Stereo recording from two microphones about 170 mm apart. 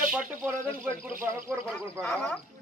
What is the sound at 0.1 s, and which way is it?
Speech, 10° right (ahead or behind).